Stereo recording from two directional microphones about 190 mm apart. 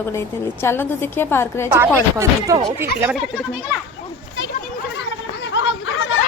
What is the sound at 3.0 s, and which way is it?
Speech, centre (ahead or behind).